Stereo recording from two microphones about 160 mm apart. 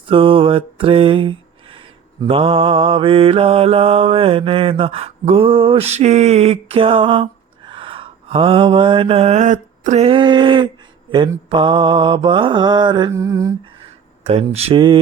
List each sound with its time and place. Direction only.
0.1 s mantra: 35° right (ahead or behind)
14.3 s mantra: 40° right (ahead or behind)